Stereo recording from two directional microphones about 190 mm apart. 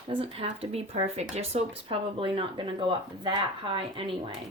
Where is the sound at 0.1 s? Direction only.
30° right (ahead or behind).